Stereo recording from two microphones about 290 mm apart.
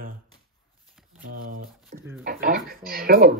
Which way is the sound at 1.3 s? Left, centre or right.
Right.